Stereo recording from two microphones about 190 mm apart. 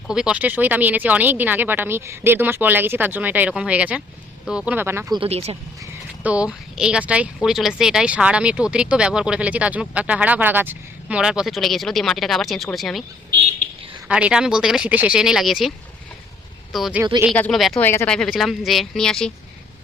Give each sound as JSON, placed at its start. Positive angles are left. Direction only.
{"t": 0.1, "sound": "speech", "side_deg": -5}
{"t": 5.2, "sound": "speech", "side_deg": -30}
{"t": 5.8, "sound": "speech", "side_deg": -5}
{"t": 14.1, "sound": "speech", "side_deg": -5}
{"t": 16.7, "sound": "speech", "side_deg": 0}